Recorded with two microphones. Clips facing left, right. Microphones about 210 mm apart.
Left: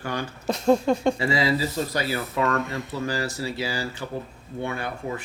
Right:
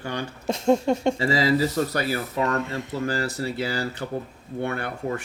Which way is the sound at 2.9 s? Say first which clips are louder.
Right 2 dB; 50° right (ahead or behind).